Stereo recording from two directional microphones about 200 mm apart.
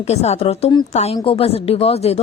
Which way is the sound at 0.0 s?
30° left (ahead or behind).